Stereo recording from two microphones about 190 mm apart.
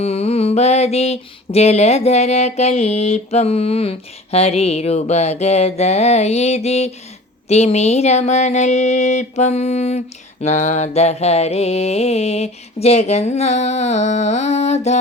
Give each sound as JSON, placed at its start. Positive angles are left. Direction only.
{"t": 0.0, "sound": "mantra", "side_deg": 35}